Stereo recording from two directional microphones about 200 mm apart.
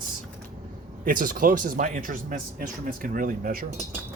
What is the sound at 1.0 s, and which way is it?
Speech, 45° right (ahead or behind).